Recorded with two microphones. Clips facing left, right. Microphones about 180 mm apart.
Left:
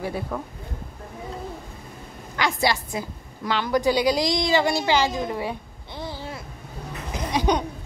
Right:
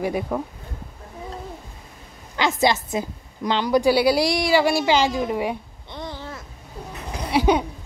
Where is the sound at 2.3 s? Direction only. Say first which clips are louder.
Right 3 dB; 20° right (ahead or behind).